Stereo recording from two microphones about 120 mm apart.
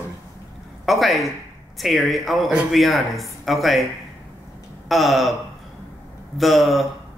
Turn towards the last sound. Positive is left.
turn(degrees=0)  # may be behind; listen again after turning